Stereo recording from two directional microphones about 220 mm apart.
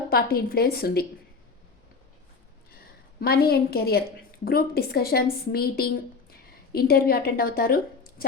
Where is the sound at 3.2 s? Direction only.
45° left (ahead or behind).